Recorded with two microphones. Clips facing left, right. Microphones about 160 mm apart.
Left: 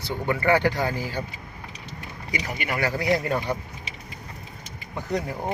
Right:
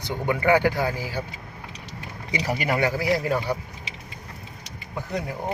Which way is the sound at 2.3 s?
35° right (ahead or behind).